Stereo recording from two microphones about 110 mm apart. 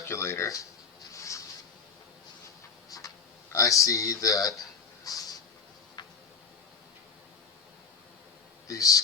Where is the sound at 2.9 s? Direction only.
30° left (ahead or behind).